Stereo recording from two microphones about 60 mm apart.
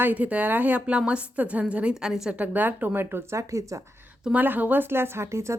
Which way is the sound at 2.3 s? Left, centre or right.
Right.